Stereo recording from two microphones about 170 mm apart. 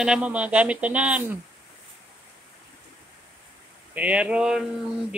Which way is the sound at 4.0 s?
5° right (ahead or behind).